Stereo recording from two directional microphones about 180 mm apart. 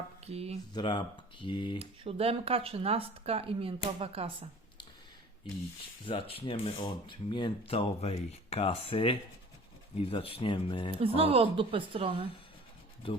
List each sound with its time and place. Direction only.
0.3 s speech: 35° right (ahead or behind)
0.7 s speech: 25° left (ahead or behind)
1.8 s speech: 35° right (ahead or behind)
6.1 s speech: 30° left (ahead or behind)
10.9 s speech: 30° right (ahead or behind)
13.0 s speech: 30° left (ahead or behind)